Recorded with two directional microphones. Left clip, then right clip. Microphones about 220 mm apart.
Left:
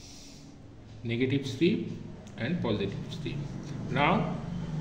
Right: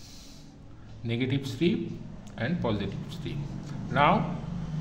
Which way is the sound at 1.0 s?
35° right (ahead or behind).